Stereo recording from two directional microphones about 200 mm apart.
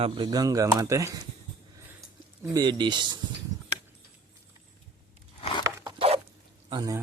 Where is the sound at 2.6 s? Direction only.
20° right (ahead or behind).